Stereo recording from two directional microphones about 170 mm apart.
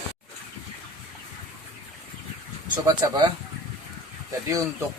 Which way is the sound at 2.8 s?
25° right (ahead or behind).